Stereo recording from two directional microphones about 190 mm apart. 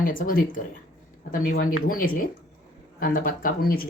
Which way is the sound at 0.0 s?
45° left (ahead or behind).